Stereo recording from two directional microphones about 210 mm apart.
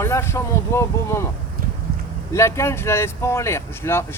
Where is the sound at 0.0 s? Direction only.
10° left (ahead or behind).